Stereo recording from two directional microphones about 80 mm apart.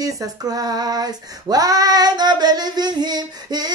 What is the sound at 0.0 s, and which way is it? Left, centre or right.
Female singing, right.